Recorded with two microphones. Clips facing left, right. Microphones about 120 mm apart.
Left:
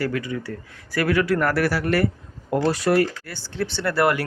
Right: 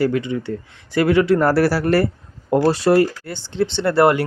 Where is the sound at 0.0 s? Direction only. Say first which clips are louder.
Right 6 dB; 25° right (ahead or behind).